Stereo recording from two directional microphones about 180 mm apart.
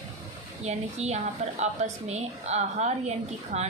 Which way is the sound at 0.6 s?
35° right (ahead or behind).